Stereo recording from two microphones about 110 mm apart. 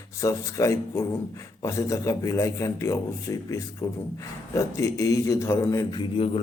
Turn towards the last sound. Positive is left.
turn(degrees=40)  # may be behind; listen again after turning